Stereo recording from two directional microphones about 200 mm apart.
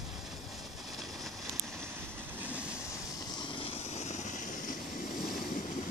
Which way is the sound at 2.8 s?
15° left (ahead or behind).